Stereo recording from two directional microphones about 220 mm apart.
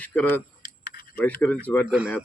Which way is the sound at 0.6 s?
40° left (ahead or behind).